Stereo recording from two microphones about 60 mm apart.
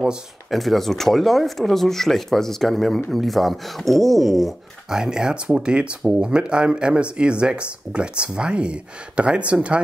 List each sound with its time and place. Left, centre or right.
0.5 s speech: centre; by 9.8 s right